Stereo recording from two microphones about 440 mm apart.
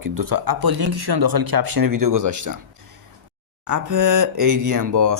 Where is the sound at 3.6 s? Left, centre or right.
Right.